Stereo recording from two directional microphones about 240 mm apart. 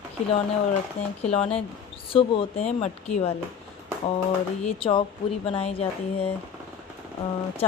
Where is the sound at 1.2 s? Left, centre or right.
Left.